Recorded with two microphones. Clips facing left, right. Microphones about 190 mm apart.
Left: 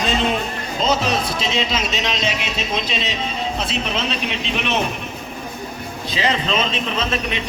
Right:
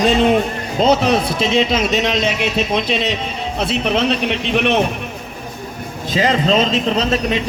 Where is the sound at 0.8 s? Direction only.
60° right (ahead or behind).